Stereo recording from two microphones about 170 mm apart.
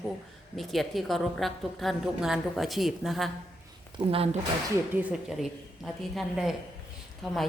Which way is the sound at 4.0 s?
35° right (ahead or behind).